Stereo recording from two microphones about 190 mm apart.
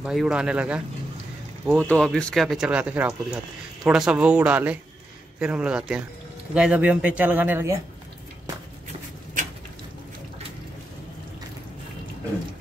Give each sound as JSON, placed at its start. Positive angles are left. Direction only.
{"t": 0.0, "sound": "speech", "side_deg": 0}
{"t": 1.9, "sound": "speech", "side_deg": 5}
{"t": 9.4, "sound": "a sound", "side_deg": -40}